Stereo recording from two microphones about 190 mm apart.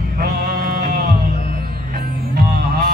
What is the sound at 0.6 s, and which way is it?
Music, 50° right (ahead or behind).